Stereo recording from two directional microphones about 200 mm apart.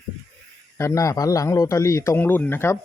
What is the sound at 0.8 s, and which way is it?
A man's voice, 15° left (ahead or behind).